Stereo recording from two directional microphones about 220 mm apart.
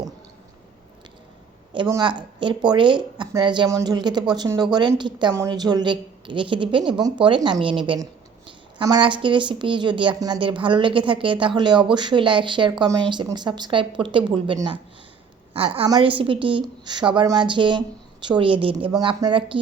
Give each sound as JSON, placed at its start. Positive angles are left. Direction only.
{"t": 1.7, "sound": "speech", "side_deg": -20}